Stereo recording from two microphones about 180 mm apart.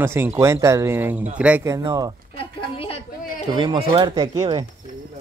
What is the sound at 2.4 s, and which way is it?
Speech, 30° left (ahead or behind).